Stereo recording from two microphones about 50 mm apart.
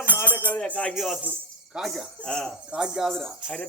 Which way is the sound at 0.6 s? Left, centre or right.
Left.